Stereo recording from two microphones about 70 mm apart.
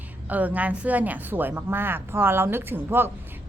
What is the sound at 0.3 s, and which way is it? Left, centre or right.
A woman's voice, right.